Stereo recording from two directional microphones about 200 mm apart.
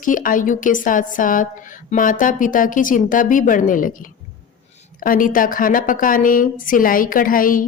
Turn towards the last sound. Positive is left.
turn(degrees=45)  # may be behind; listen again after turning